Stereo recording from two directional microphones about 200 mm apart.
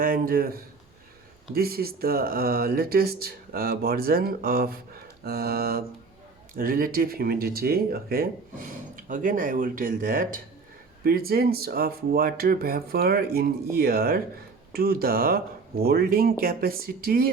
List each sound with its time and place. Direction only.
0.0 s speech: 45° right (ahead or behind)
1.5 s speech: 50° right (ahead or behind)